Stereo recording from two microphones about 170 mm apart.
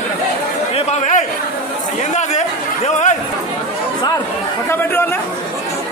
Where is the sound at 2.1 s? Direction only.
45° left (ahead or behind).